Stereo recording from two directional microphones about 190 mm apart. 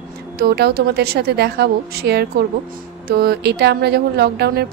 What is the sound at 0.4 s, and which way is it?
Speech, 55° right (ahead or behind).